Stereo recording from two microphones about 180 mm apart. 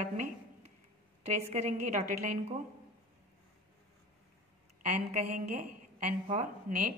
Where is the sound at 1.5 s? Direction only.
40° right (ahead or behind).